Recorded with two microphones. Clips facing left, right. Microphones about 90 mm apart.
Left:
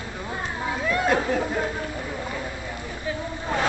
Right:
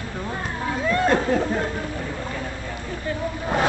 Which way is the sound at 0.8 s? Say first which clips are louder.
Right 3 dB; 5° left (ahead or behind).